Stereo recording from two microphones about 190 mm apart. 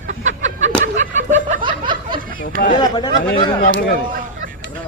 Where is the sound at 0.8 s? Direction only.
40° right (ahead or behind).